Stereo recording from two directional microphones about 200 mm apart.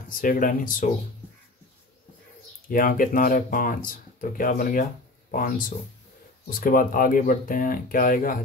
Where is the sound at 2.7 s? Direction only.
45° left (ahead or behind).